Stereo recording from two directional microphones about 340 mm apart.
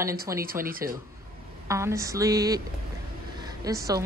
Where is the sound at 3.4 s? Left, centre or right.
Centre.